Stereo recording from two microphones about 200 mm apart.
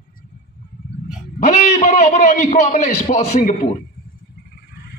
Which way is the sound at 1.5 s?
35° left (ahead or behind).